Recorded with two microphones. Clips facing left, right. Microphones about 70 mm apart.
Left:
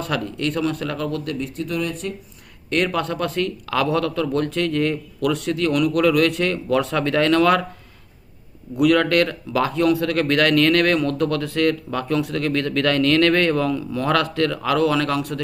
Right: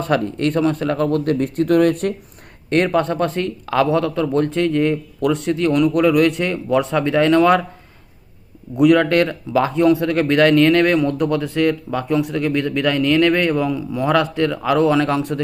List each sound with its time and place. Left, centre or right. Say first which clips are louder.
0.0 s a man's voice: right 6 dB; right
2.6 s a man's voice: right 5 dB; right
8.7 s a man's voice: right 3 dB; right